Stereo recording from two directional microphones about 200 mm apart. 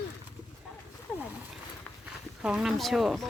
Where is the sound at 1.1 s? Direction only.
5° left (ahead or behind).